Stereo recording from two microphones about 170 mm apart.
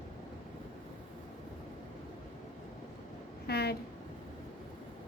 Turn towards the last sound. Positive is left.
turn(degrees=70)  # may be behind; listen again after turning